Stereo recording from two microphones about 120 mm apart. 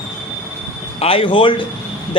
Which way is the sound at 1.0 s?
50° left (ahead or behind).